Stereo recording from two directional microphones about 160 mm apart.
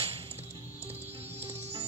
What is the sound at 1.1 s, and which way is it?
Music, 40° right (ahead or behind).